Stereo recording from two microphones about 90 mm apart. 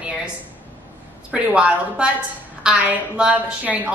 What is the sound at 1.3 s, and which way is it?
A woman's voice, 10° right (ahead or behind).